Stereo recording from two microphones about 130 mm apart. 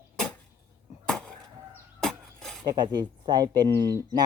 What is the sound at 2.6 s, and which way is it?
Speech, 35° right (ahead or behind).